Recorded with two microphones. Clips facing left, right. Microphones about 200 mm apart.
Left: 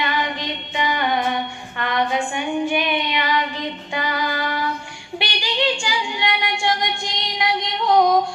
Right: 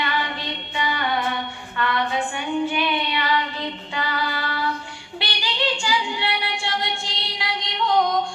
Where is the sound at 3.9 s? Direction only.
15° left (ahead or behind).